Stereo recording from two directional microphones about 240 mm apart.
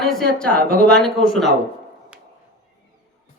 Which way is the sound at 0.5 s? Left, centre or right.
Right.